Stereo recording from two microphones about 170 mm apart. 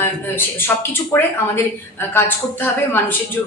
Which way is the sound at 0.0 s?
15° left (ahead or behind).